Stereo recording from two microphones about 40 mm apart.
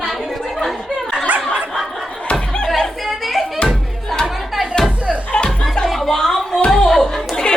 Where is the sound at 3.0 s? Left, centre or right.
Centre.